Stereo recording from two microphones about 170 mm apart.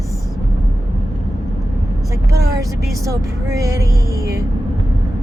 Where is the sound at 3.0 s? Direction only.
20° right (ahead or behind).